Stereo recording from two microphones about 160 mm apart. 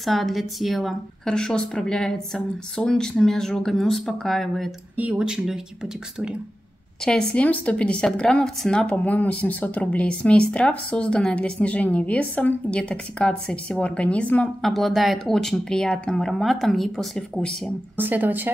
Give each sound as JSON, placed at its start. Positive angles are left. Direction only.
{"t": 0.0, "sound": "a woman's voice", "side_deg": 0}
{"t": 7.1, "sound": "speech", "side_deg": 5}
{"t": 17.9, "sound": "speech", "side_deg": -10}